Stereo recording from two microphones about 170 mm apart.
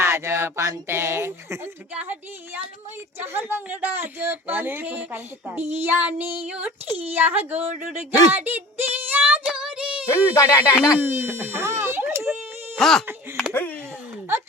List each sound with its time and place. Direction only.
0.0 s speech: 15° right (ahead or behind)
3.3 s speech: 10° right (ahead or behind)
7.6 s speech: 45° right (ahead or behind)
8.3 s child singing: 10° right (ahead or behind)
10.2 s speech: 20° left (ahead or behind)
11.1 s speech: 15° right (ahead or behind)
12.7 s speech: centre (ahead or behind)